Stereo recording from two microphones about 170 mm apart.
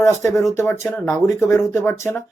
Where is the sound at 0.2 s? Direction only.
15° left (ahead or behind).